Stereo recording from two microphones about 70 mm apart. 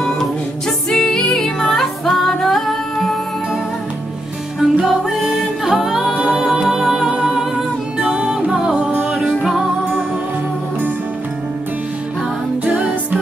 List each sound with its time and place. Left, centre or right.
0.0 s music: centre
4.6 s music: centre
8.9 s music: right
9.2 s music: centre
12.6 s music: right